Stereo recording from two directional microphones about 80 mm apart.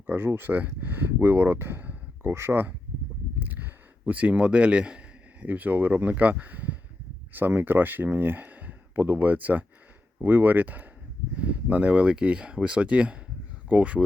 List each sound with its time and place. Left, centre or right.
0.1 s speech: right